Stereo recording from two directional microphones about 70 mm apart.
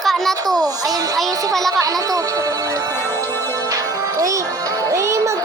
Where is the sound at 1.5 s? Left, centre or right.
Right.